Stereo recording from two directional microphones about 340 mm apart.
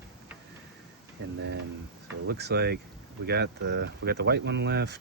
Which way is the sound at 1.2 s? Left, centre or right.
Right.